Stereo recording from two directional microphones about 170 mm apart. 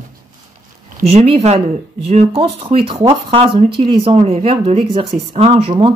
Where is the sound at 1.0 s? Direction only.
35° right (ahead or behind).